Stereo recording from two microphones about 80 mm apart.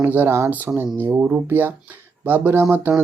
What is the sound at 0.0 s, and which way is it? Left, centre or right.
Speech, right.